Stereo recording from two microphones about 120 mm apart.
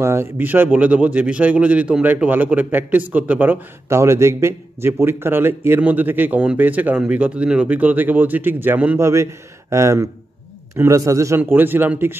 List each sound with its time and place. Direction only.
0.0 s a man's voice: 20° right (ahead or behind)